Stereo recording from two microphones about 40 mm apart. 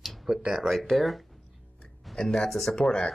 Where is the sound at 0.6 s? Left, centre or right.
Centre.